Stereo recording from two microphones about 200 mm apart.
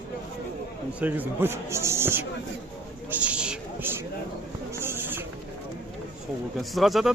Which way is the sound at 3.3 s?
5° right (ahead or behind).